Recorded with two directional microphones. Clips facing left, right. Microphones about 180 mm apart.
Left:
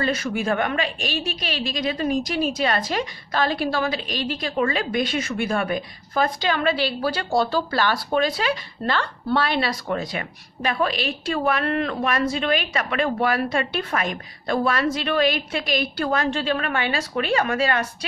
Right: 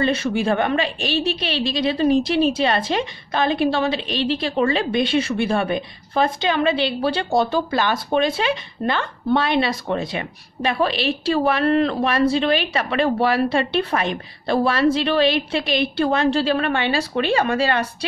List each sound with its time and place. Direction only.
0.0 s a woman's voice: 25° right (ahead or behind)